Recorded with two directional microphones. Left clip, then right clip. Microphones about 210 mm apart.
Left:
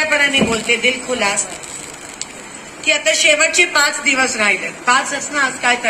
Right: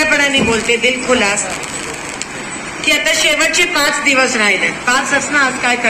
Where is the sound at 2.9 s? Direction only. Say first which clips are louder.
Right 1 dB; 60° left (ahead or behind).